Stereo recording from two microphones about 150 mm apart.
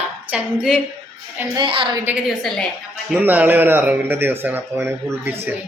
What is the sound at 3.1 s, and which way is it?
Speech, 10° right (ahead or behind).